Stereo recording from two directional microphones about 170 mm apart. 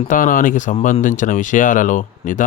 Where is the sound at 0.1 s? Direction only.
50° left (ahead or behind).